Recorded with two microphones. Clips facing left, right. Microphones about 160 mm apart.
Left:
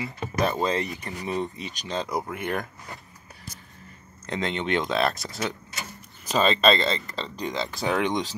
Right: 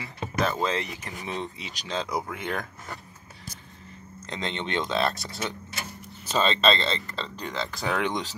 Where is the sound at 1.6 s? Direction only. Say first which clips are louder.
Left 4 dB; 90° right.